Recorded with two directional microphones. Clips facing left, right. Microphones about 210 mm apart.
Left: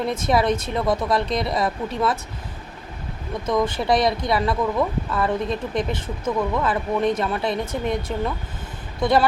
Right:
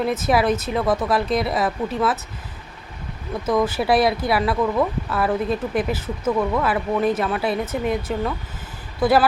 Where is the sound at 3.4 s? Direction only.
5° right (ahead or behind).